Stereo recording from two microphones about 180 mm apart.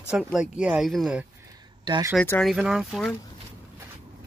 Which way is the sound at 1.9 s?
20° right (ahead or behind).